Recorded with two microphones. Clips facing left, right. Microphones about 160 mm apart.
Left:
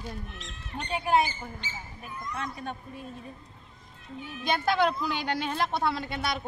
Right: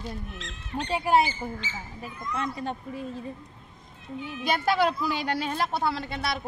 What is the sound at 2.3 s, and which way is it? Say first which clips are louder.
Speech: right 5 dB; 30° right (ahead or behind).